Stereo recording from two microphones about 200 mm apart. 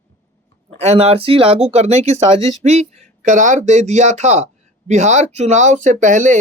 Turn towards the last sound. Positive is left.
turn(degrees=-40)  # may be behind; listen again after turning